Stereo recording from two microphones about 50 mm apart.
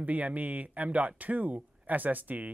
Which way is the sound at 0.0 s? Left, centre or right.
Right.